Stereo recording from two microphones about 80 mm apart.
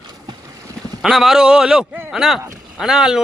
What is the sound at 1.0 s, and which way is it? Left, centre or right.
Speech, centre.